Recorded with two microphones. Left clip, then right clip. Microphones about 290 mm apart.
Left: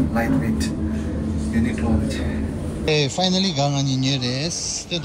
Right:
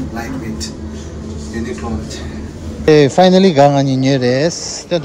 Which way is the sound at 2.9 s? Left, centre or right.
Centre.